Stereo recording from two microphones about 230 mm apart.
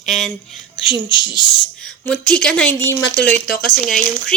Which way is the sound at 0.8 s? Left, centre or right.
Left.